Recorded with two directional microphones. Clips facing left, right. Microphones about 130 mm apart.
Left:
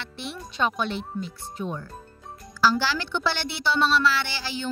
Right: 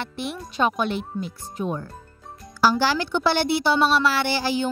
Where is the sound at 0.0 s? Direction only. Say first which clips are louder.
Right 6 dB; 50° right (ahead or behind).